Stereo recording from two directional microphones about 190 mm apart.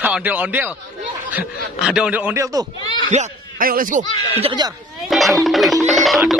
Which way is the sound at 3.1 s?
40° right (ahead or behind).